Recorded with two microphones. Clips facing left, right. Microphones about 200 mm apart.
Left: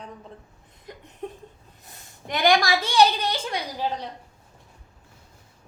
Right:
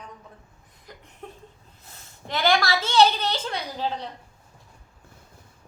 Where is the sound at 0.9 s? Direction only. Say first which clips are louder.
Left 4 dB; 20° left (ahead or behind).